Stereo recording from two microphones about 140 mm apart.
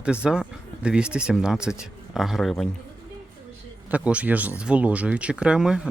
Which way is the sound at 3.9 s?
10° right (ahead or behind).